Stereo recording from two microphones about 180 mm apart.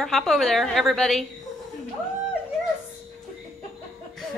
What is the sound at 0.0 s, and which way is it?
A woman's voice, centre (ahead or behind).